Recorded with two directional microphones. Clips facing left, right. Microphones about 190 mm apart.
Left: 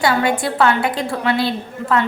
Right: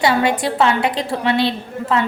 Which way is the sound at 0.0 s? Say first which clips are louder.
Right 1 dB; 25° right (ahead or behind).